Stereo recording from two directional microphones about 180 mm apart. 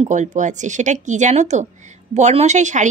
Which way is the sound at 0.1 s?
40° right (ahead or behind).